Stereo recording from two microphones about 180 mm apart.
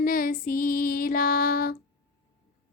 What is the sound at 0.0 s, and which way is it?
A woman's voice, 55° left (ahead or behind).